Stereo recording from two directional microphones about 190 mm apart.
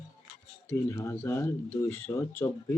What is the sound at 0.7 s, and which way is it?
Speech, 15° left (ahead or behind).